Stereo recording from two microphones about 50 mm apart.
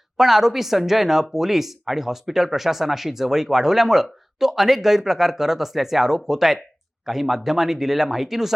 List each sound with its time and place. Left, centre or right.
0.2 s speech: centre